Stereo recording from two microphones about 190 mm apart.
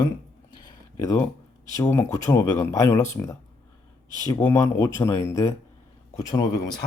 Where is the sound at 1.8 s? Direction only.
15° left (ahead or behind).